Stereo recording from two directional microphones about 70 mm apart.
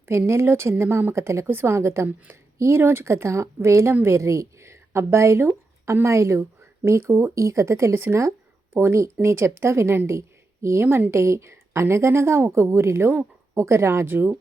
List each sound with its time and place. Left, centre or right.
0.0 s speech: right
14.1 s speech: right